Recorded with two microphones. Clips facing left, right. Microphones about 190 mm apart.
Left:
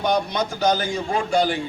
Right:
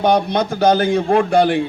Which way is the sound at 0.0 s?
60° right (ahead or behind).